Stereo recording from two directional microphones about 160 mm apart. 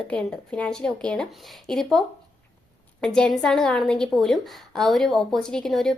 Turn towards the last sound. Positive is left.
turn(degrees=0)  # may be behind; listen again after turning